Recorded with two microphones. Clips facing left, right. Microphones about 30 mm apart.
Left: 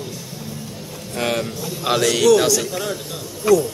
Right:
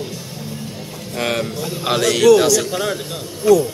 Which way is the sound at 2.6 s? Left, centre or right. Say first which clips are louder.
Right 4 dB; right.